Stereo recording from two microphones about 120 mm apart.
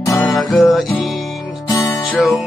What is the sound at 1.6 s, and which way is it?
Music, 25° left (ahead or behind).